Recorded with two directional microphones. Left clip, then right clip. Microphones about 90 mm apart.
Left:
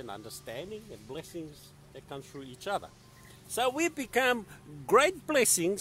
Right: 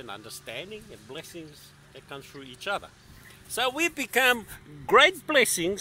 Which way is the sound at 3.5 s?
15° left (ahead or behind).